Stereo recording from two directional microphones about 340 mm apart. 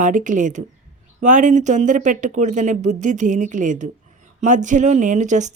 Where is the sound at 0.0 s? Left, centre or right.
Right.